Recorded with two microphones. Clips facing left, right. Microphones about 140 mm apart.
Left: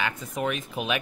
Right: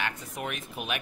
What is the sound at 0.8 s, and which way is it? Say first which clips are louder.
Speech: left 6 dB; 90° left.